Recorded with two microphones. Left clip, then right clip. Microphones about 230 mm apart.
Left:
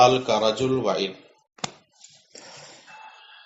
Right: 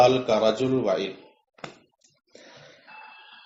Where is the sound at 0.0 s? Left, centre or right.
Left.